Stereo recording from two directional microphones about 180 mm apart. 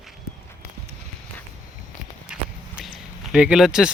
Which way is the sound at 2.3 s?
5° right (ahead or behind).